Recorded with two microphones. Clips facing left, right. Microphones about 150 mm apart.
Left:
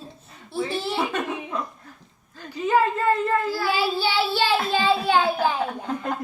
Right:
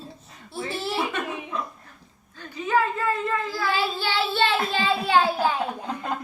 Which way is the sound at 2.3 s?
35° left (ahead or behind).